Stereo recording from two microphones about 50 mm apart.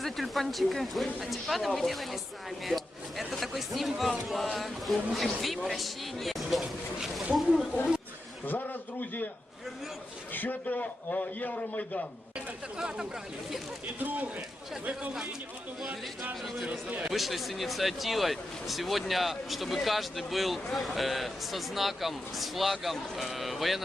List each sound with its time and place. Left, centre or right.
0.0 s speech: centre
8.4 s a man's voice: left
10.3 s a man's voice: left
14.0 s speech: right
17.1 s speech: centre